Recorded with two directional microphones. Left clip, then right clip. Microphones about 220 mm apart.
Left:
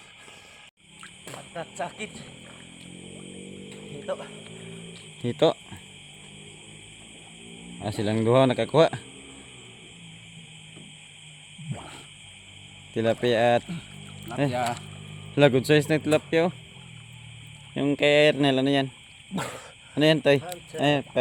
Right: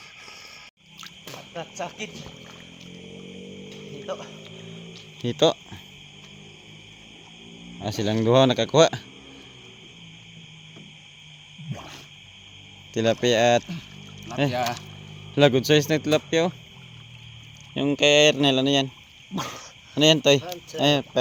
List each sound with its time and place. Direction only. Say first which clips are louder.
1.8 s speech: even; 10° left (ahead or behind)
3.7 s music: left 1 dB; 20° left (ahead or behind)
5.2 s speech: right 2 dB; 5° right (ahead or behind)
7.8 s speech: right 2 dB; 5° right (ahead or behind)
11.7 s whale vocalization: right 1 dB; 10° right (ahead or behind)
12.9 s speech: right 2 dB; 10° right (ahead or behind)
17.7 s speech: right 2 dB; 5° right (ahead or behind)
19.3 s frog: right 1 dB; 15° left (ahead or behind)
19.9 s speech: right 3 dB; 5° right (ahead or behind)